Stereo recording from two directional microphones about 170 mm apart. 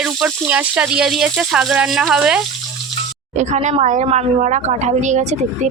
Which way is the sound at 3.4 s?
45° right (ahead or behind).